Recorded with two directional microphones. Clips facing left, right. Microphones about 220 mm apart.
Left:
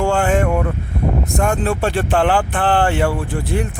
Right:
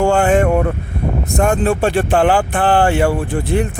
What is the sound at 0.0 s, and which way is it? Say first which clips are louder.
Vehicle: right 4 dB; 15° right (ahead or behind).